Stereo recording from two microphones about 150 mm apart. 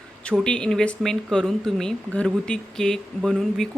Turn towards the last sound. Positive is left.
turn(degrees=5)  # may be behind; listen again after turning